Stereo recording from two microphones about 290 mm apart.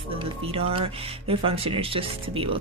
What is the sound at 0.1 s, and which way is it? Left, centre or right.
Speech, centre.